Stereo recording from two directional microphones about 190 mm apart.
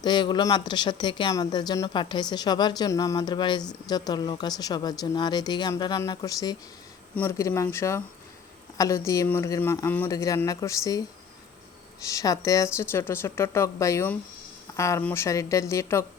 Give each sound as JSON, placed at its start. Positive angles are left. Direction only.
{"t": 0.0, "sound": "speech", "side_deg": 25}
{"t": 12.0, "sound": "speech", "side_deg": 20}